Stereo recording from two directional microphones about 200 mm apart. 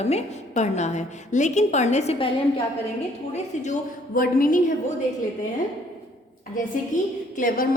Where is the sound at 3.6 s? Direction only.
40° left (ahead or behind).